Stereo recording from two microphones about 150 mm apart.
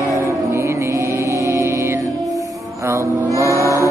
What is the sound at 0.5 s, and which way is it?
Music, 20° right (ahead or behind).